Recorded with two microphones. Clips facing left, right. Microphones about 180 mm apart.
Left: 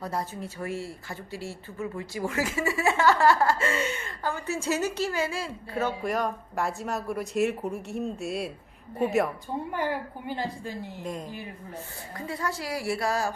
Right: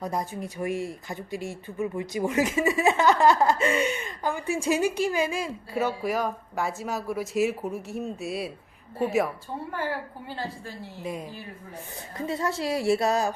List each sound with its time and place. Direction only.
0.0 s a woman's voice: 15° right (ahead or behind)
9.7 s a woman's voice: 15° left (ahead or behind)
11.0 s a woman's voice: 5° right (ahead or behind)
12.1 s a woman's voice: 25° right (ahead or behind)